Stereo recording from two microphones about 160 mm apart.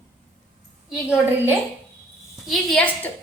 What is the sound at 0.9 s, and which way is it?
A woman's voice, 10° right (ahead or behind).